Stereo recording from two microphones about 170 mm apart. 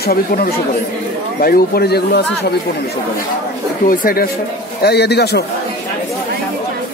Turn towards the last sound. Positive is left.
turn(degrees=75)  # may be behind; listen again after turning